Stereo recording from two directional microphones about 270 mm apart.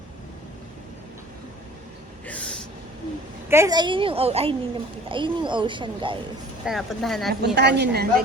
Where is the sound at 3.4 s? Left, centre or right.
Centre.